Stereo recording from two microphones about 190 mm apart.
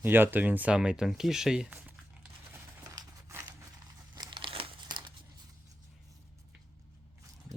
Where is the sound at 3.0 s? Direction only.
15° right (ahead or behind).